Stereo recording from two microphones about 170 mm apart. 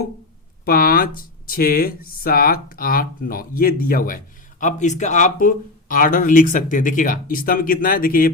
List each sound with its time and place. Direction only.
0.6 s speech: 60° left (ahead or behind)
4.6 s speech: 45° left (ahead or behind)